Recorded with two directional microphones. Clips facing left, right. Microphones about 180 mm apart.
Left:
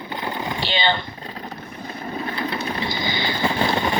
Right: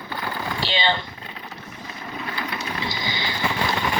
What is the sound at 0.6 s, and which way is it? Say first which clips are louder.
Speech: left 1 dB; 55° left (ahead or behind).